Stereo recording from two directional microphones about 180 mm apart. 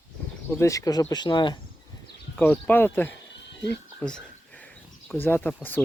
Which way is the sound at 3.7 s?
5° left (ahead or behind).